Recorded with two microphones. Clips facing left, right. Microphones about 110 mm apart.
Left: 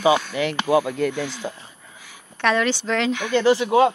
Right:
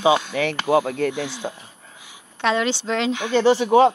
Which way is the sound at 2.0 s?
20° right (ahead or behind).